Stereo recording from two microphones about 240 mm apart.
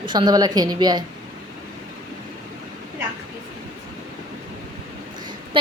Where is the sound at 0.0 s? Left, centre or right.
Centre.